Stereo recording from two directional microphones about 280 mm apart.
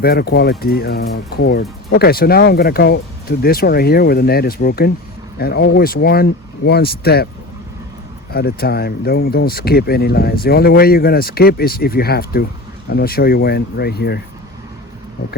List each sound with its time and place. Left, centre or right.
0.0 s speech: left
8.3 s speech: left